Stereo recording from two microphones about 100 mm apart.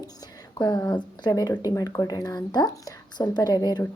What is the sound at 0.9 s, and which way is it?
Speech, 45° left (ahead or behind).